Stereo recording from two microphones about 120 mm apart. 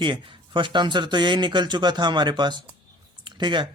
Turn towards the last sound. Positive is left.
turn(degrees=-40)  # may be behind; listen again after turning